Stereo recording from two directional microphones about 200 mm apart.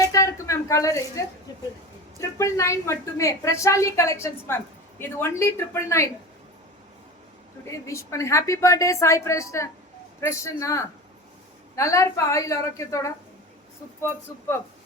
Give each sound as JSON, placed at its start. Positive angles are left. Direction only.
{"t": 0.0, "sound": "a sound", "side_deg": 15}
{"t": 2.4, "sound": "a woman's voice", "side_deg": 15}
{"t": 7.7, "sound": "a woman's voice", "side_deg": 15}